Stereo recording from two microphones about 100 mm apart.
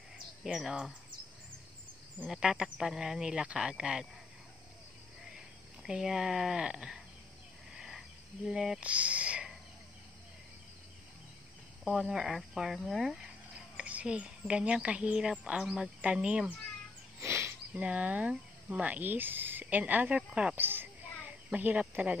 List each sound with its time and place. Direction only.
0.4 s speech: 5° right (ahead or behind)
2.2 s speech: 5° right (ahead or behind)
5.8 s speech: 5° right (ahead or behind)
7.7 s cricket: 5° right (ahead or behind)
8.5 s speech: 5° right (ahead or behind)
11.8 s speech: 5° right (ahead or behind)
17.2 s a sound: 30° right (ahead or behind)
17.7 s speech: 15° right (ahead or behind)
20.5 s speech: 20° right (ahead or behind)